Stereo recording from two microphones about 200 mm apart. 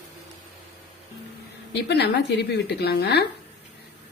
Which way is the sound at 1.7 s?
55° left (ahead or behind).